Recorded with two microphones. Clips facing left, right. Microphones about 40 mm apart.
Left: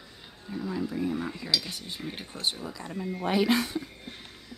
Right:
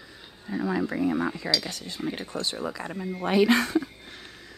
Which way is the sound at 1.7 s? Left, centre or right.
Left.